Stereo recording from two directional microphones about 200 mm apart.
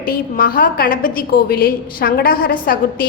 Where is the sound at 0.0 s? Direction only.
45° left (ahead or behind).